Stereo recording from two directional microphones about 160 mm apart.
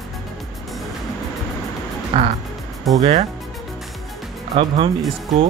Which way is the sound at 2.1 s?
35° right (ahead or behind).